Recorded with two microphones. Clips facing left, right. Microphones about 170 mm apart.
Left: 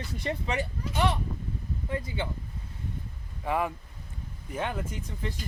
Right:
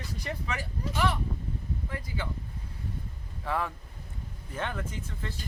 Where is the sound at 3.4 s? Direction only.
15° left (ahead or behind).